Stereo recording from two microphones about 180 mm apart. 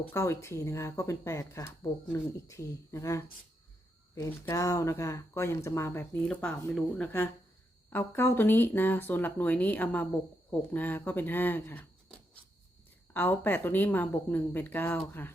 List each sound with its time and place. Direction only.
0.0 s speech: 15° left (ahead or behind)